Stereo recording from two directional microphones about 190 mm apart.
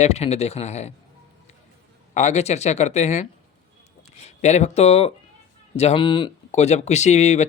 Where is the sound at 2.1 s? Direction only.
35° left (ahead or behind).